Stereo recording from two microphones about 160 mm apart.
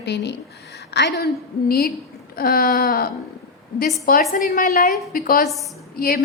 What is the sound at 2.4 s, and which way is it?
A woman's voice, 65° left (ahead or behind).